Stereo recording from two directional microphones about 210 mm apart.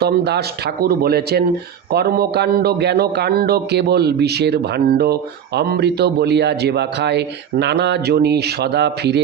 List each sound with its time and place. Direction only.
0.0 s speech: 50° right (ahead or behind)